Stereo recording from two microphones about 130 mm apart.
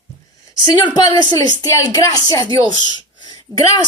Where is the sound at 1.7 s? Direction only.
25° left (ahead or behind).